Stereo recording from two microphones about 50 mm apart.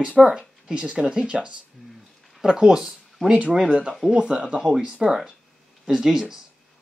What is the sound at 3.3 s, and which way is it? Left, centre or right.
Speech, right.